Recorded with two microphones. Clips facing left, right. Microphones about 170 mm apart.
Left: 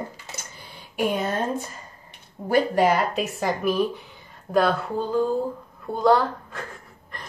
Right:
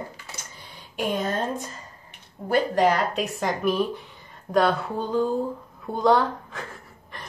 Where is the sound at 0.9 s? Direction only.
10° left (ahead or behind).